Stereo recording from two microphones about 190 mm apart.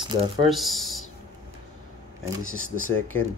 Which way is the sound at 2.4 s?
90° left.